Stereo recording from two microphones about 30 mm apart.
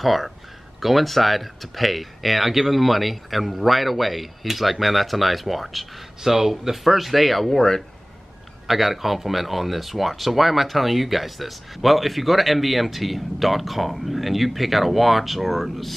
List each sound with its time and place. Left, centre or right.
0.0 s speech: centre
6.2 s speech: centre
7.5 s speech: centre
8.6 s speech: centre